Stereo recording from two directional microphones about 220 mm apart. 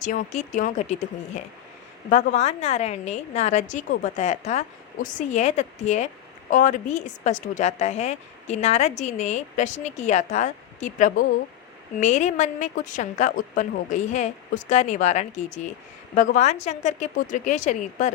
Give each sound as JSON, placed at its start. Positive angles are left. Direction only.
{"t": 0.0, "sound": "a woman's voice", "side_deg": 35}
{"t": 2.0, "sound": "a woman's voice", "side_deg": 30}